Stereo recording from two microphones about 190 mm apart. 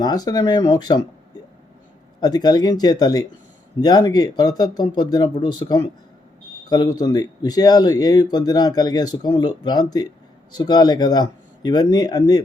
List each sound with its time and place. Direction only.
0.0 s speech: 20° left (ahead or behind)
2.2 s speech: 20° left (ahead or behind)